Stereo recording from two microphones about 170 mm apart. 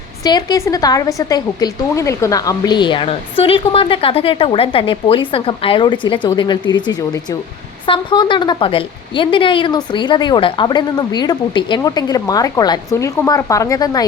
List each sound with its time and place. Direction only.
0.3 s a woman's voice: 25° left (ahead or behind)